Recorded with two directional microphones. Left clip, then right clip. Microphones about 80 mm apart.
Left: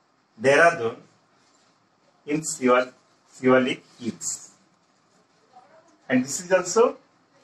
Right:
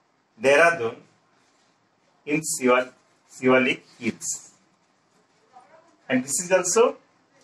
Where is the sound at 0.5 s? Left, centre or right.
Right.